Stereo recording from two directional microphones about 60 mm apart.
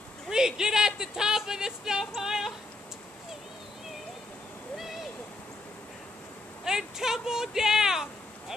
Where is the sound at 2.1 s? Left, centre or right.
Centre.